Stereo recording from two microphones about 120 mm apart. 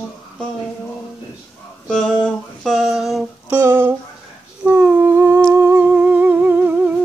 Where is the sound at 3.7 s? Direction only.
15° right (ahead or behind).